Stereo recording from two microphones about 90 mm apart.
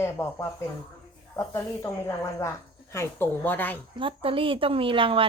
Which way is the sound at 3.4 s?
20° left (ahead or behind).